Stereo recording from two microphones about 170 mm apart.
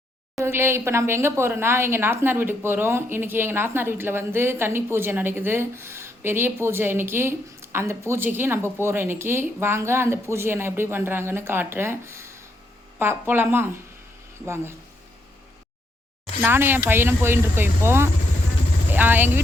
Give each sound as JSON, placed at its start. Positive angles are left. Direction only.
{"t": 0.4, "sound": "speech", "side_deg": -15}
{"t": 16.4, "sound": "speech", "side_deg": -10}